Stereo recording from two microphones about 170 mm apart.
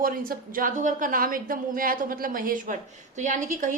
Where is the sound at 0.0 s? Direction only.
55° right (ahead or behind).